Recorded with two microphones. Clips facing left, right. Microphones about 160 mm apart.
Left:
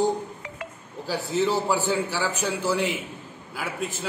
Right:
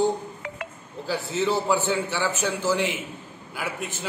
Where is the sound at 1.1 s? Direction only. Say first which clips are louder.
Left 1 dB; 10° left (ahead or behind).